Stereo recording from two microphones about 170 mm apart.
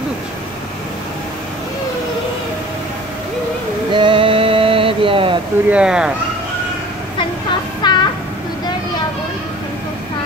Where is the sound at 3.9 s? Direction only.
30° right (ahead or behind).